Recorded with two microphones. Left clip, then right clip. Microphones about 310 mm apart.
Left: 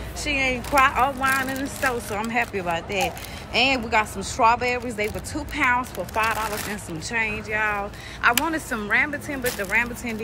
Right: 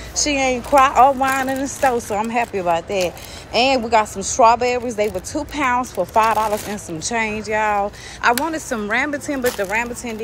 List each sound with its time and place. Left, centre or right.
0.1 s speech: centre